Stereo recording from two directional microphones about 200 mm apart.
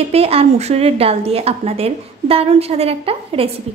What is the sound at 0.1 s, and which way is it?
A woman's voice, 30° right (ahead or behind).